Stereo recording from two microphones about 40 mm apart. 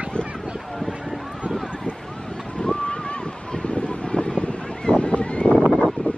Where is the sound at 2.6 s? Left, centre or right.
Left.